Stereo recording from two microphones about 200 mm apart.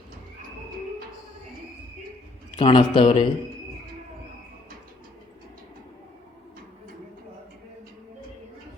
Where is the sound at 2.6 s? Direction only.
25° left (ahead or behind).